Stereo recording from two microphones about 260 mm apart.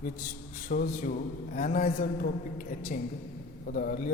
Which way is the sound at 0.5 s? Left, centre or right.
Left.